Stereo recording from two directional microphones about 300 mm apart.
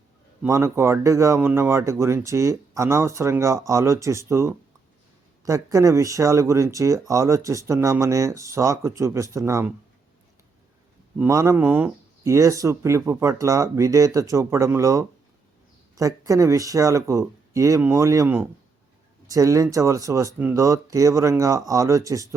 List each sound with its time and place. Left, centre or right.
0.4 s speech: centre
11.2 s speech: centre